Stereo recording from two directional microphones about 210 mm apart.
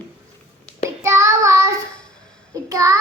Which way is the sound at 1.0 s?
15° right (ahead or behind).